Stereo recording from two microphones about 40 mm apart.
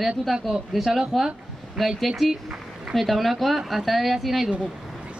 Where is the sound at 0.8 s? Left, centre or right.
Centre.